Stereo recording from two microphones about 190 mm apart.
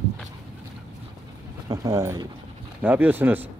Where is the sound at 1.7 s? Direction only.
15° right (ahead or behind).